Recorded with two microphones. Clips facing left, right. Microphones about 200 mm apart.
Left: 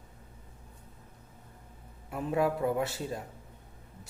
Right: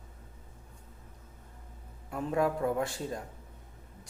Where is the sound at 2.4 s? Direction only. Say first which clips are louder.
Left 1 dB; 5° left (ahead or behind).